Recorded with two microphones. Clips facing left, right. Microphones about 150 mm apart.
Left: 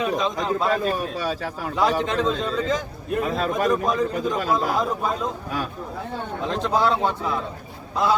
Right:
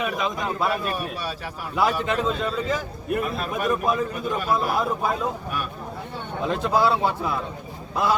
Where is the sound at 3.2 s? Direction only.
90° left.